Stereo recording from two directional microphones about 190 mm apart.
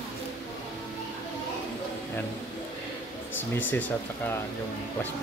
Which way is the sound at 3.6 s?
10° left (ahead or behind).